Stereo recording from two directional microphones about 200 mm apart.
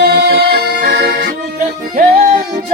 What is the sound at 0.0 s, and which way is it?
Music, 55° right (ahead or behind).